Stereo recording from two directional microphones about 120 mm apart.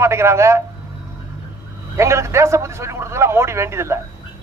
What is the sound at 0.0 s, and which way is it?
Speech, 25° right (ahead or behind).